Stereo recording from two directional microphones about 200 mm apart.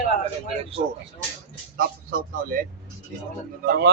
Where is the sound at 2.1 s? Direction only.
45° right (ahead or behind).